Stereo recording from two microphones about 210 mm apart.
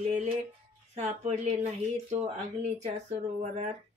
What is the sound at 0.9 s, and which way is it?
Speech, 30° right (ahead or behind).